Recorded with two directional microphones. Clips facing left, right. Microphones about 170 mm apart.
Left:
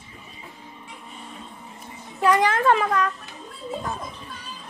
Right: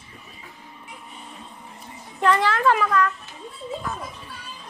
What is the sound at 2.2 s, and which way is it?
Speech, 15° left (ahead or behind).